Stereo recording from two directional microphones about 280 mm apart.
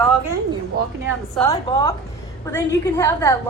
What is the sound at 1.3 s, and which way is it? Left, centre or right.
Speech, centre.